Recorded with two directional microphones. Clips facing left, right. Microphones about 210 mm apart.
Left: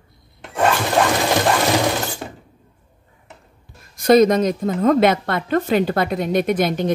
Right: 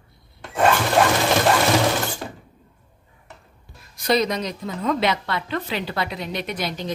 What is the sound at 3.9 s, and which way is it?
A woman's voice, 50° left (ahead or behind).